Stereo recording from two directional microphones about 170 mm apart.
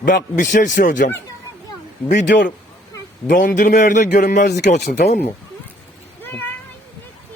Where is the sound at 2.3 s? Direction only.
90° left.